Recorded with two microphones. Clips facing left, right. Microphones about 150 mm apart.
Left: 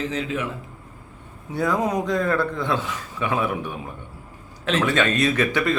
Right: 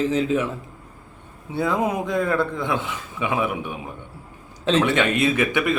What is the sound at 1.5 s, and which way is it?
A man's voice, 20° right (ahead or behind).